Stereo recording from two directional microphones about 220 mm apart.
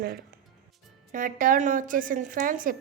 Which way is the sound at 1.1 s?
35° right (ahead or behind).